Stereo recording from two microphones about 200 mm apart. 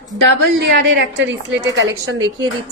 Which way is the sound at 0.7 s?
65° right (ahead or behind).